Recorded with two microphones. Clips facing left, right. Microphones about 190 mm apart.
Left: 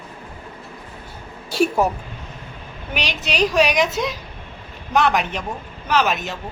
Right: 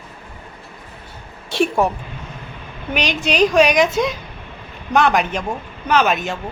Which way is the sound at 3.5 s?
Centre (ahead or behind).